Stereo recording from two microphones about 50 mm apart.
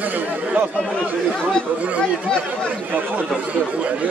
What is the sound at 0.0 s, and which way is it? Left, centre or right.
Speech, right.